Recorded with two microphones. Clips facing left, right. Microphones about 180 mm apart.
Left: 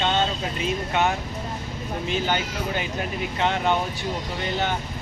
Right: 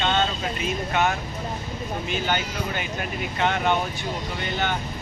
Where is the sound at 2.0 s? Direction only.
30° left (ahead or behind).